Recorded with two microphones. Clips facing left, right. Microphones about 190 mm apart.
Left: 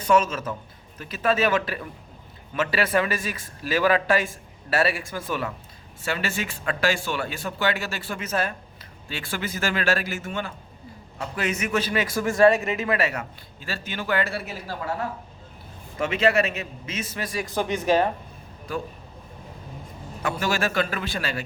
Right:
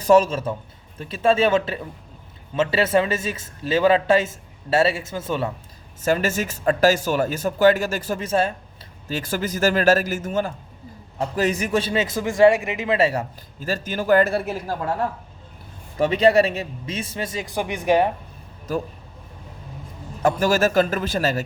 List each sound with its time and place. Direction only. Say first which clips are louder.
0.0 s a man's voice: right 5 dB; 35° right (ahead or behind)
6.1 s speech: right 7 dB; 45° right (ahead or behind); by 8.5 s 25° right (ahead or behind)
9.0 s a man's voice: right 6 dB; 45° right (ahead or behind); by 13.0 s 15° right (ahead or behind)
13.0 s a man's voice: right 6 dB; 30° right (ahead or behind)
13.6 s speech: right 7 dB; 45° right (ahead or behind)
16.0 s a man's voice: right 5 dB; 35° right (ahead or behind)
17.4 s speech: left 1 dB; 15° right (ahead or behind)
20.2 s speech: right 7 dB; 40° right (ahead or behind)